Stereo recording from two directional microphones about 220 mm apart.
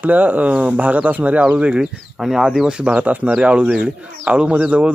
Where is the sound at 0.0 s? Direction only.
5° right (ahead or behind).